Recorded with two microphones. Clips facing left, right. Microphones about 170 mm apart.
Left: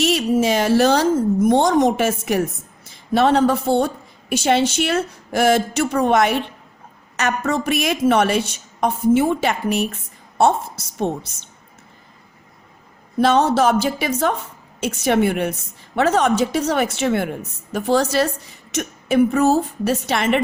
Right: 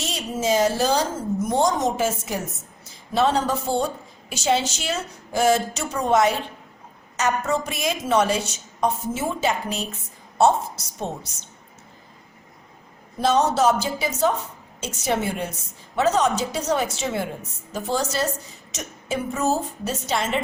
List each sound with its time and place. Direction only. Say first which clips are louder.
0.0 s a woman's voice: left 9 dB; 70° left (ahead or behind)
13.2 s a woman's voice: left 3 dB; 60° left (ahead or behind)